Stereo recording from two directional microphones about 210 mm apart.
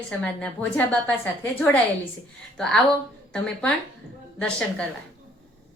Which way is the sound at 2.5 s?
5° left (ahead or behind).